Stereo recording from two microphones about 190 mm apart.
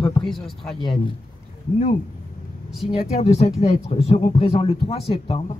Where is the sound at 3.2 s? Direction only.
35° left (ahead or behind).